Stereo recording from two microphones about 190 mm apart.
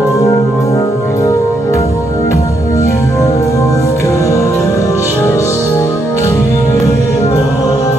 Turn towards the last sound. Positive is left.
turn(degrees=20)  # may be behind; listen again after turning